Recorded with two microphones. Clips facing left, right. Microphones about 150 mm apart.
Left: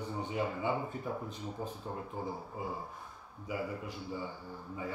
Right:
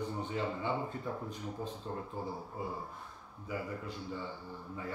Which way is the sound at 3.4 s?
15° left (ahead or behind).